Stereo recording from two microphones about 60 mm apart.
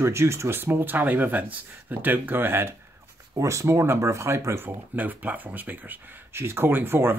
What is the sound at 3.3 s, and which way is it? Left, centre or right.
Speech, right.